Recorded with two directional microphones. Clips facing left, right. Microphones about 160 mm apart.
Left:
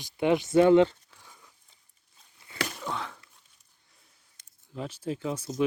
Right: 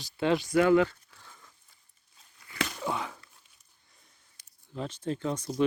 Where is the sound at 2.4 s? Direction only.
25° left (ahead or behind).